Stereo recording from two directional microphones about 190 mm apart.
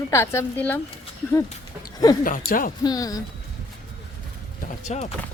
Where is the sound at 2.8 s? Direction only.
20° left (ahead or behind).